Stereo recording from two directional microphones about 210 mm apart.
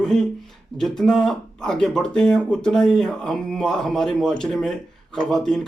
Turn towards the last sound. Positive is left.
turn(degrees=0)  # may be behind; listen again after turning